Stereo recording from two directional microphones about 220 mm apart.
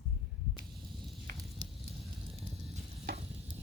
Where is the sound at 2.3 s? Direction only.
30° right (ahead or behind).